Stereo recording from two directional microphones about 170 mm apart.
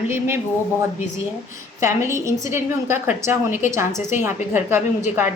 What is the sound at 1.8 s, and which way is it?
A woman's voice, 15° right (ahead or behind).